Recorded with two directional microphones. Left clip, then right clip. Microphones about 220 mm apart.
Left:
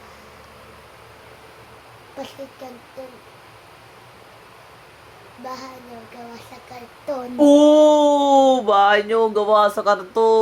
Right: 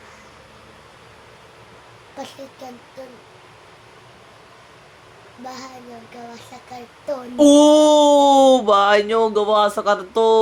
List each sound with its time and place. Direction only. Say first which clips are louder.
2.1 s a woman's voice: even; centre (ahead or behind)
7.3 s speech: right 1 dB; 20° right (ahead or behind)